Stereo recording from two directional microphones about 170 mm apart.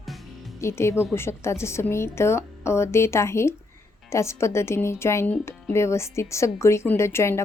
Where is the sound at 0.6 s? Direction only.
15° left (ahead or behind).